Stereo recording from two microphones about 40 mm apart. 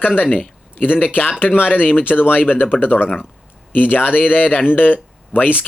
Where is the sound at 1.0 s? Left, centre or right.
Left.